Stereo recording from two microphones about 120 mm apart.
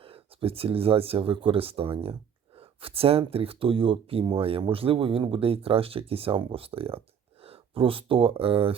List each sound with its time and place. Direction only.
0.0 s speech: 50° right (ahead or behind)